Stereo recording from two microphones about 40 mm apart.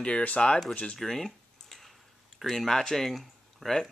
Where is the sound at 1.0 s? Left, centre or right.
Centre.